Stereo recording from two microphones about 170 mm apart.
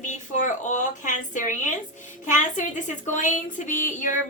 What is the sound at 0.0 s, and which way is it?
A woman's voice, 45° left (ahead or behind).